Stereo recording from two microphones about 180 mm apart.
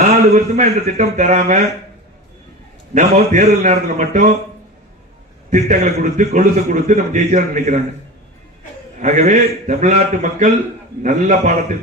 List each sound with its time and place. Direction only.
0.0 s a man's voice: 40° right (ahead or behind)
2.9 s a man's voice: 40° right (ahead or behind)
5.5 s a man's voice: 40° right (ahead or behind)
9.0 s a man's voice: 45° right (ahead or behind)